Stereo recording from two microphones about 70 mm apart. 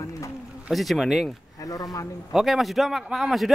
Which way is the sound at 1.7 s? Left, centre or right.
Left.